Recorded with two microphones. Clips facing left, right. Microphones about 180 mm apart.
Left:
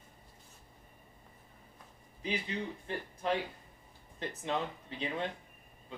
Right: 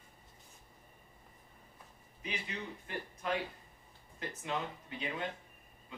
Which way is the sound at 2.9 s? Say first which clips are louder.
Left 2 dB; 30° left (ahead or behind).